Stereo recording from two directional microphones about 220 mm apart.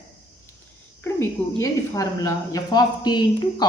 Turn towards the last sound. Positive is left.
turn(degrees=20)  # may be behind; listen again after turning